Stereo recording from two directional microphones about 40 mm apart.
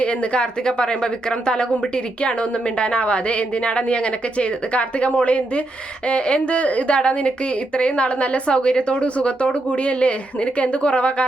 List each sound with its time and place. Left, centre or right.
0.0 s a woman's voice: left